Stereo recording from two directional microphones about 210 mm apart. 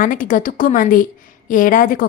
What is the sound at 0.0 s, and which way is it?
Speech, 40° left (ahead or behind).